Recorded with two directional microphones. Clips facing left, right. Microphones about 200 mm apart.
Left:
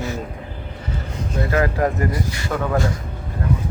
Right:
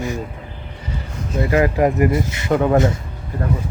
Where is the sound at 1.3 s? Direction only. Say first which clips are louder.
Right 4 dB; 15° right (ahead or behind).